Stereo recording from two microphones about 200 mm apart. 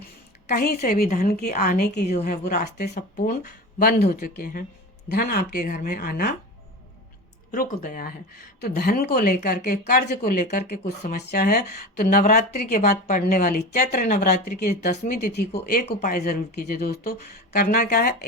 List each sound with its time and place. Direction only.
0.4 s speech: 50° left (ahead or behind); by 2.2 s 35° left (ahead or behind)
2.2 s speech: 50° left (ahead or behind)
7.5 s speech: 45° left (ahead or behind)
15.9 s speech: 35° left (ahead or behind)
16.1 s speech: 50° left (ahead or behind)